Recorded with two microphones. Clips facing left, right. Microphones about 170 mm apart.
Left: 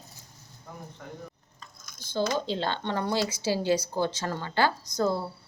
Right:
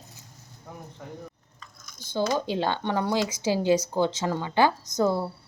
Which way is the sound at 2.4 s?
15° right (ahead or behind).